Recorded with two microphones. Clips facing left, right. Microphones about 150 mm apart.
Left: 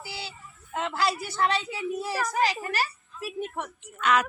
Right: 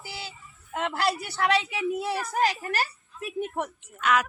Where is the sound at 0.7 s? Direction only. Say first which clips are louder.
Even; 55° right (ahead or behind).